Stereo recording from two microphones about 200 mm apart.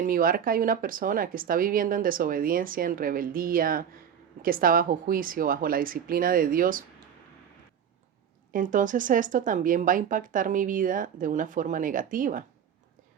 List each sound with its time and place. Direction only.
0.0 s speech: 45° right (ahead or behind)
8.5 s speech: 40° right (ahead or behind)